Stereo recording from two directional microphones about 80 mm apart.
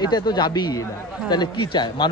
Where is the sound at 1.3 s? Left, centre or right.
Left.